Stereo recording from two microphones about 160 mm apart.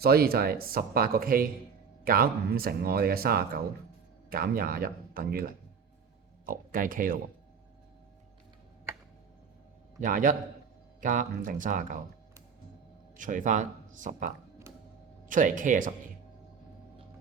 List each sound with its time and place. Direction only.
0.0 s speech: 70° right (ahead or behind)
10.0 s speech: 55° right (ahead or behind)
13.1 s speech: 55° right (ahead or behind)